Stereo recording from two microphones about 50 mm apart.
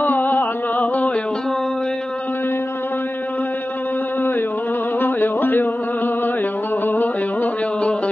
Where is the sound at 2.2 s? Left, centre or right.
Left.